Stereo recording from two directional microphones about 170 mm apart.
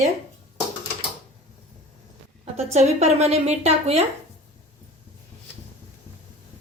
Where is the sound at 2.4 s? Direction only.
40° right (ahead or behind).